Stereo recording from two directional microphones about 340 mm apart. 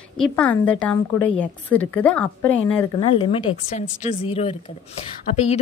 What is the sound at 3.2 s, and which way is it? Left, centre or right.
A woman's voice, centre.